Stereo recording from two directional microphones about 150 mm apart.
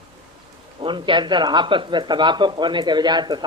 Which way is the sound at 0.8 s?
35° right (ahead or behind).